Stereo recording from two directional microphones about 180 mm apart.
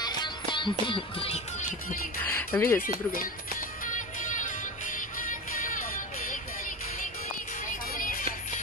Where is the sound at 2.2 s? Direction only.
10° left (ahead or behind).